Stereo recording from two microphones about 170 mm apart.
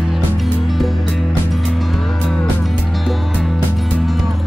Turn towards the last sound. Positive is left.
turn(degrees=0)  # may be behind; listen again after turning